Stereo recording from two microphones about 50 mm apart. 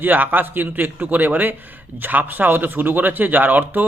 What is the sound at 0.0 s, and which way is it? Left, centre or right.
A man's voice, right.